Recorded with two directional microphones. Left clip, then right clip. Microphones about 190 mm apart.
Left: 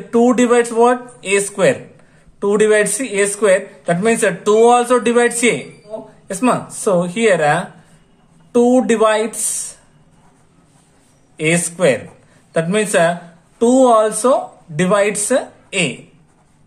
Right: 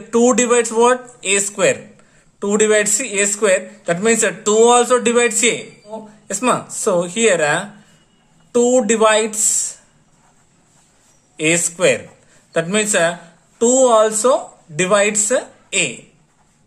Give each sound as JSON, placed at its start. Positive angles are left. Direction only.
{"t": 0.1, "sound": "a woman's voice", "side_deg": -25}
{"t": 11.3, "sound": "speech", "side_deg": -20}